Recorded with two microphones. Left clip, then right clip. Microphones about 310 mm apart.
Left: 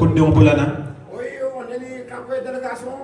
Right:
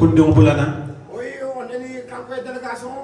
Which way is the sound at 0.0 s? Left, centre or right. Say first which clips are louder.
Right 2 dB; left.